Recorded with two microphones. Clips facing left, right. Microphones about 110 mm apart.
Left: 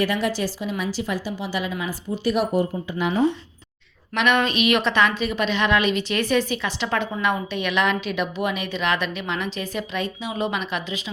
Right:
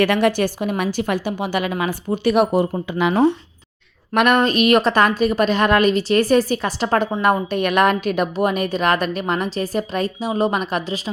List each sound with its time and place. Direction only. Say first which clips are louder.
0.0 s a woman's voice: right 6 dB; 65° right (ahead or behind)
4.1 s speech: right 5 dB; 50° right (ahead or behind)
4.4 s a woman's voice: right 5 dB; 40° right (ahead or behind)